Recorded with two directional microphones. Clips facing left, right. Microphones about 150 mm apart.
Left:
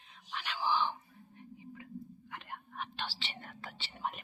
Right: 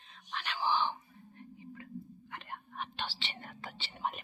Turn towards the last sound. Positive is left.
turn(degrees=0)  # may be behind; listen again after turning